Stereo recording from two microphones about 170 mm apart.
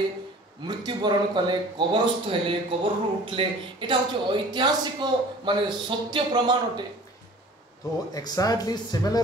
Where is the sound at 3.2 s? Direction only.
30° right (ahead or behind).